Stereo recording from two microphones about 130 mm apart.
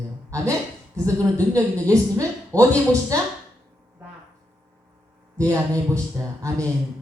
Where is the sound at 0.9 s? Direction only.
25° right (ahead or behind).